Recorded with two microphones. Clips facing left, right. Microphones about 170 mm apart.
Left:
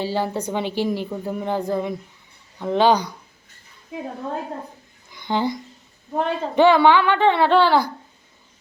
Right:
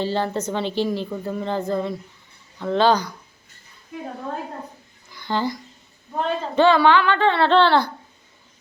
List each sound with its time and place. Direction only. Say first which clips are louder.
0.0 s a woman's voice: even; 10° left (ahead or behind)
5.1 s a woman's voice: left 2 dB; 20° left (ahead or behind)